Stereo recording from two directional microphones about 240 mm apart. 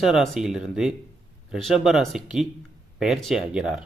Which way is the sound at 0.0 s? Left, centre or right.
Centre.